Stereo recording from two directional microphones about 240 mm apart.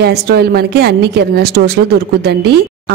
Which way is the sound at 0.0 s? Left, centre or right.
Right.